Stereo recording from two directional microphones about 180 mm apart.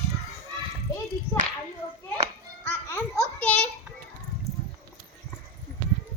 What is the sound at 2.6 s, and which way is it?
Babbling, 10° left (ahead or behind).